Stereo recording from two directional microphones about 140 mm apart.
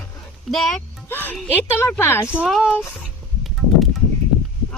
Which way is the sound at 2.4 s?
Centre (ahead or behind).